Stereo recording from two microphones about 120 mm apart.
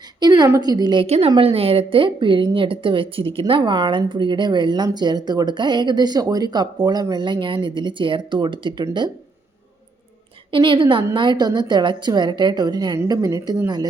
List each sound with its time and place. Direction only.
0.2 s a sound: 35° right (ahead or behind)
0.4 s speech: 30° right (ahead or behind)
1.0 s a woman's voice: 60° right (ahead or behind); by 9.0 s 40° right (ahead or behind)
10.5 s speech: 45° right (ahead or behind)